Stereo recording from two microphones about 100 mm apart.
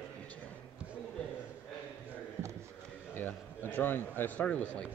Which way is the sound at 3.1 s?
20° left (ahead or behind).